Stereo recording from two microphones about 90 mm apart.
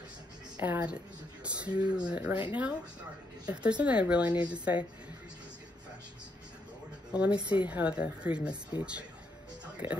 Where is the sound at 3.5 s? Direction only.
15° right (ahead or behind).